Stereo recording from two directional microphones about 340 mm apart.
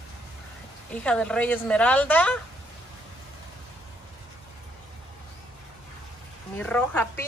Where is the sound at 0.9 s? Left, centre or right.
Centre.